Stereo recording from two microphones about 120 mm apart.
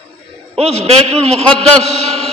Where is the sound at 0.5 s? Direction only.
60° right (ahead or behind).